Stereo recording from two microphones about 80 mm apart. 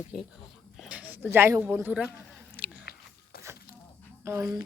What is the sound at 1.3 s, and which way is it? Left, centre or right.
Speech, right.